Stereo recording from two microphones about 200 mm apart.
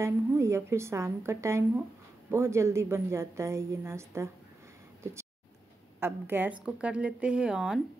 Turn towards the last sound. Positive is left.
turn(degrees=-5)  # may be behind; listen again after turning